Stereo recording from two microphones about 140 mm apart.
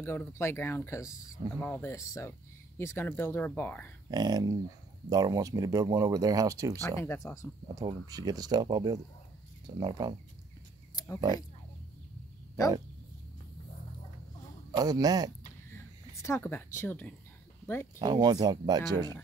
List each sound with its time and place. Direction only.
0.0 s speech: 15° left (ahead or behind)
4.1 s speech: 30° right (ahead or behind)
6.8 s speech: 15° left (ahead or behind)
7.6 s speech: 30° right (ahead or behind)
11.1 s speech: 25° right (ahead or behind)
14.8 s speech: 25° right (ahead or behind)
15.7 s speech: 20° left (ahead or behind)
17.9 s speech: 30° right (ahead or behind)